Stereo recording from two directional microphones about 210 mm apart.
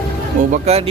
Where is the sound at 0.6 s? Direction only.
30° right (ahead or behind).